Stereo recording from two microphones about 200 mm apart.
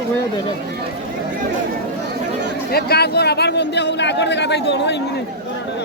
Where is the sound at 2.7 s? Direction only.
55° left (ahead or behind).